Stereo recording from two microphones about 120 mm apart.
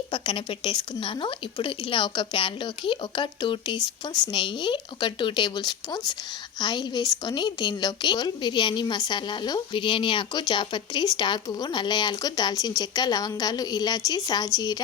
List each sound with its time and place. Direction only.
0.1 s a woman's voice: 45° left (ahead or behind)